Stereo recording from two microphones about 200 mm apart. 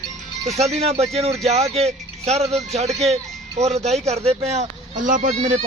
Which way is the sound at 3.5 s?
35° right (ahead or behind).